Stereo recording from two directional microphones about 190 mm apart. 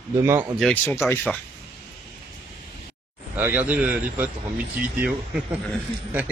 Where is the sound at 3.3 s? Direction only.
10° right (ahead or behind).